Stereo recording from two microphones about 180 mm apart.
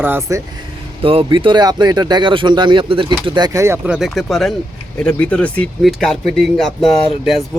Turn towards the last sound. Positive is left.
turn(degrees=0)  # may be behind; listen again after turning